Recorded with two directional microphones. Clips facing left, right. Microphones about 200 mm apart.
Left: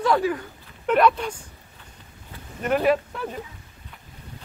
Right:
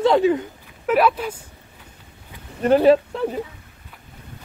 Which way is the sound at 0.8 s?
5° right (ahead or behind).